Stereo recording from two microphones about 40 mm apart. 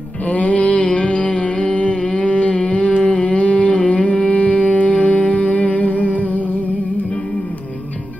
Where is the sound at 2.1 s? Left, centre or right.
Left.